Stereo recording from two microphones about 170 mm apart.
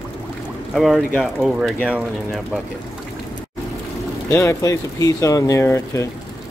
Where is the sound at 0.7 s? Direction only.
Centre (ahead or behind).